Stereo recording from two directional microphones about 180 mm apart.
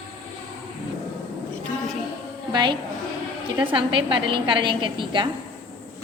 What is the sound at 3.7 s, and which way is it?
A woman's voice, 30° right (ahead or behind).